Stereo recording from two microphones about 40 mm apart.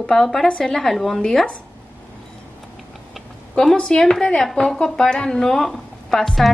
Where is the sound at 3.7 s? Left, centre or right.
Centre.